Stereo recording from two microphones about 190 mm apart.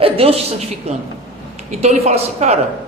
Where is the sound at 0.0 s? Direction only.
30° right (ahead or behind).